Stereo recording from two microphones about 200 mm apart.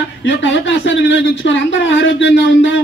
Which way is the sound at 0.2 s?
65° left (ahead or behind).